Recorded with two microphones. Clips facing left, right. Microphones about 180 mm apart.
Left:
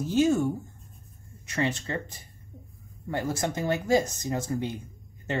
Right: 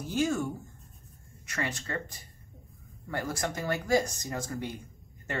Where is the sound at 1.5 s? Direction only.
25° left (ahead or behind).